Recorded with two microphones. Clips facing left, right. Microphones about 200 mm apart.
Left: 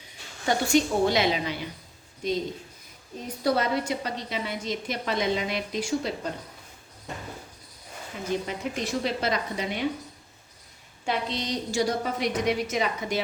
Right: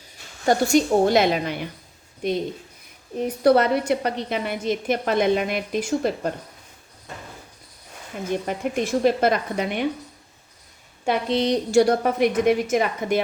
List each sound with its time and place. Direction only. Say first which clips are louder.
0.4 s a woman's voice: right 5 dB; 45° right (ahead or behind)
8.3 s a woman's voice: right 4 dB; 55° right (ahead or behind)
11.0 s a woman's voice: right 8 dB; 55° right (ahead or behind)